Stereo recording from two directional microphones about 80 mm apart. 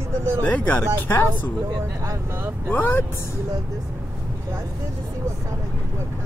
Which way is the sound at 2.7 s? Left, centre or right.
Left.